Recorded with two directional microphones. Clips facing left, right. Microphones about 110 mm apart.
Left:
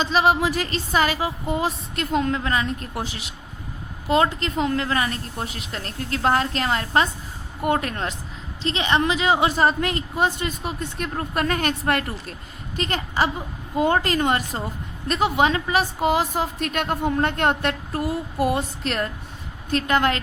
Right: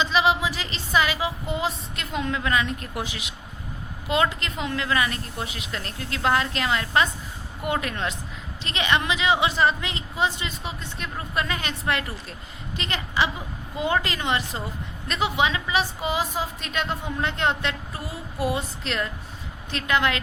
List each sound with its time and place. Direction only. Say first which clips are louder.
0.0 s a woman's voice: left 3 dB; 45° left (ahead or behind)